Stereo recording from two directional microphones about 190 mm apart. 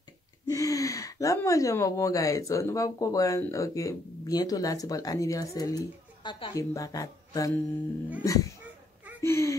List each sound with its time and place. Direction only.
0.5 s speech: 15° left (ahead or behind)